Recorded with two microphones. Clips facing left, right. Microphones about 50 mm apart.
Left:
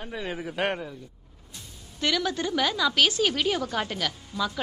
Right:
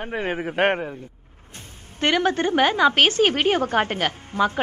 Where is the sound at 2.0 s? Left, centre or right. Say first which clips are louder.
Right 6 dB; right.